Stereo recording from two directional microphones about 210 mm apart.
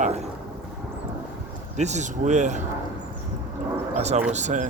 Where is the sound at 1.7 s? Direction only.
35° right (ahead or behind).